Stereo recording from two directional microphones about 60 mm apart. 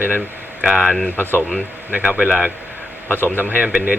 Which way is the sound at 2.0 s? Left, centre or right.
Centre.